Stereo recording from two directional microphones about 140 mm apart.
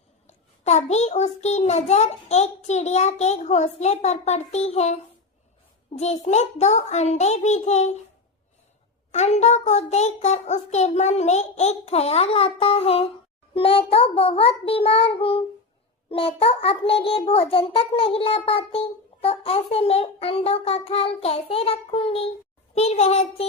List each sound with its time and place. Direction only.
0.3 s a child's voice: 50° left (ahead or behind)
6.0 s a child's voice: 55° left (ahead or behind)
9.1 s a child's voice: 55° left (ahead or behind)